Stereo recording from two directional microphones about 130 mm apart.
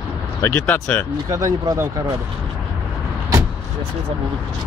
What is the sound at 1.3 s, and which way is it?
Speech, 25° right (ahead or behind).